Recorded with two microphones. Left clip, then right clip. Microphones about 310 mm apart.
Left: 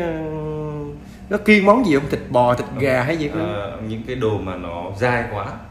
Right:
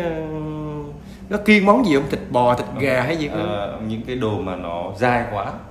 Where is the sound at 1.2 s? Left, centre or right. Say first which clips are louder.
Left 1 dB; centre.